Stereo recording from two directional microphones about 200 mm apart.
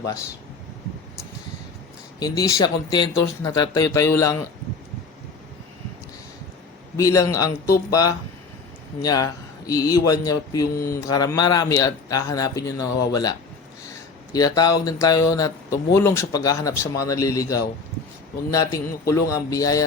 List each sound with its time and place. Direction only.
2.1 s speech: 20° left (ahead or behind)
6.9 s a man's voice: 15° left (ahead or behind)
14.3 s speech: 20° left (ahead or behind)